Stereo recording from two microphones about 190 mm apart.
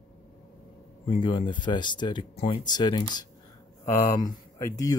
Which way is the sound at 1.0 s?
25° left (ahead or behind).